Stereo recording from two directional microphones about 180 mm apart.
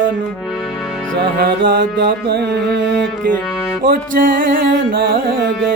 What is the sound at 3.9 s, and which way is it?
Carnatic music, 50° right (ahead or behind).